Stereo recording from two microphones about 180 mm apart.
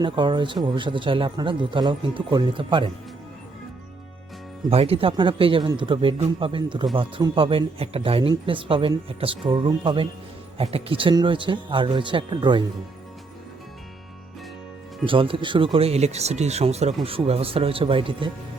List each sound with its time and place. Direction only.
0.0 s speech: 25° right (ahead or behind)
4.7 s speech: 35° right (ahead or behind)
15.0 s speech: 30° right (ahead or behind)